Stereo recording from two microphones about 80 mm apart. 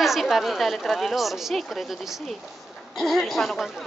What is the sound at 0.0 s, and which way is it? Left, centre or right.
A woman's voice, centre.